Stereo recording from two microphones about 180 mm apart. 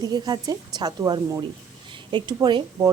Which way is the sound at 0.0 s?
20° right (ahead or behind).